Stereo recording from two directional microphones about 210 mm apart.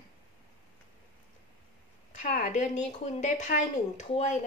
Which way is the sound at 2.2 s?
35° left (ahead or behind).